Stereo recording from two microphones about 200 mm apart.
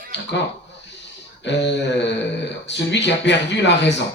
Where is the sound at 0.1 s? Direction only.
60° left (ahead or behind).